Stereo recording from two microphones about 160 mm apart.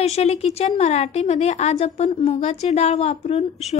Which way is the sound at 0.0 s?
40° left (ahead or behind).